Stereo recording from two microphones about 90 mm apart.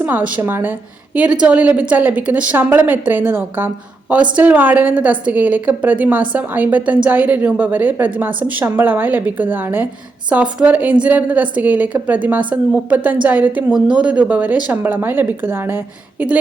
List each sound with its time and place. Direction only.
0.0 s a woman's voice: 15° right (ahead or behind)
1.1 s a woman's voice: 15° right (ahead or behind)
13.7 s a woman's voice: 10° right (ahead or behind); by 15.8 s 25° right (ahead or behind)